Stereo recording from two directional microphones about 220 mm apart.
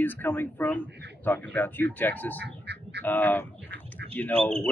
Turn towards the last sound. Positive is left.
turn(degrees=5)  # may be behind; listen again after turning